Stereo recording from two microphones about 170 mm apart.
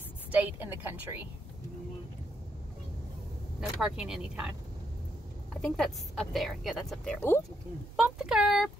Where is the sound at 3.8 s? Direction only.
5° right (ahead or behind).